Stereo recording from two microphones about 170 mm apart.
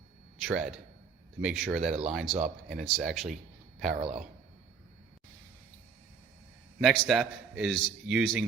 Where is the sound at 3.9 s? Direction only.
35° right (ahead or behind).